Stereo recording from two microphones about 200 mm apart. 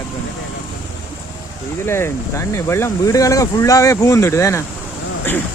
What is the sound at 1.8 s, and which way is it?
Speech, 10° left (ahead or behind).